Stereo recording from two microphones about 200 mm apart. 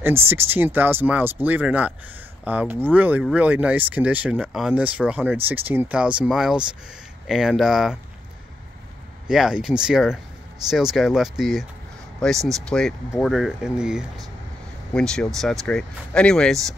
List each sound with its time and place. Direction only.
0.0 s speech: 10° right (ahead or behind)
9.3 s speech: 5° right (ahead or behind)